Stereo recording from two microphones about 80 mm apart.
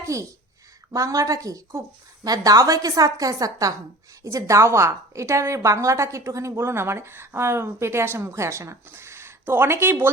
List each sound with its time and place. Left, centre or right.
0.0 s a woman's voice: right